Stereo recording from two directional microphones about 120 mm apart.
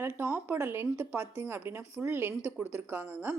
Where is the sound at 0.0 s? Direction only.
15° right (ahead or behind).